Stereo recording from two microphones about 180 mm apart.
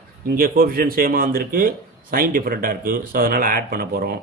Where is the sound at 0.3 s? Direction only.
55° right (ahead or behind).